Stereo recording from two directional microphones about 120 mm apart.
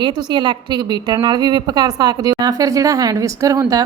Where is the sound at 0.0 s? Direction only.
40° right (ahead or behind).